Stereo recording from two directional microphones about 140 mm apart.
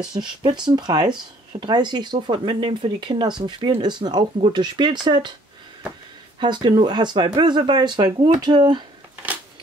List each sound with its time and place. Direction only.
0.1 s speech: 30° right (ahead or behind)
6.4 s speech: 35° right (ahead or behind)